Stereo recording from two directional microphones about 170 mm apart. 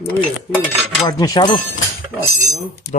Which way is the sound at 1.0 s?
20° left (ahead or behind).